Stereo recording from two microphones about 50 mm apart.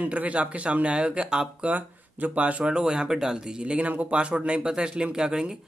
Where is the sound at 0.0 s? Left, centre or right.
Right.